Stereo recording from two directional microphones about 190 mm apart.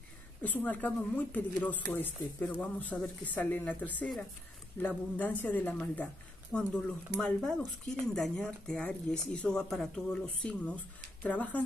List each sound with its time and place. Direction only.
0.4 s speech: 10° left (ahead or behind)